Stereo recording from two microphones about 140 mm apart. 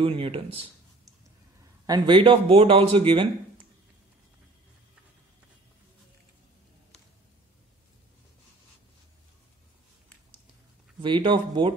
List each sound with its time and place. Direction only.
0.0 s speech: 40° right (ahead or behind)
1.9 s speech: 35° right (ahead or behind)
11.0 s speech: 35° right (ahead or behind)